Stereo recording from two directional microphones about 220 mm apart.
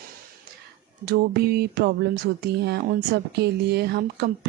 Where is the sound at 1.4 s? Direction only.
45° right (ahead or behind).